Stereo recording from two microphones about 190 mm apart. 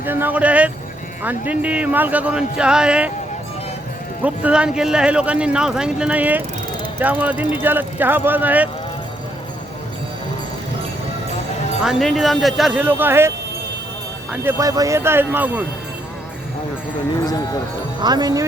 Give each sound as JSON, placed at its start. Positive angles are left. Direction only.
{"t": 0.0, "sound": "speech", "side_deg": -10}
{"t": 4.2, "sound": "speech", "side_deg": -5}
{"t": 11.9, "sound": "speech", "side_deg": 0}
{"t": 14.4, "sound": "speech", "side_deg": -20}
{"t": 17.2, "sound": "speech", "side_deg": 20}
{"t": 18.0, "sound": "speech", "side_deg": -20}